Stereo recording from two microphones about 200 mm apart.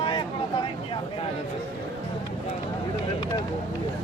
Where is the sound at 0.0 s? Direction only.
25° left (ahead or behind).